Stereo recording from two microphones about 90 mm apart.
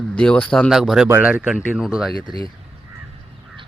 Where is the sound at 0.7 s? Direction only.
5° right (ahead or behind).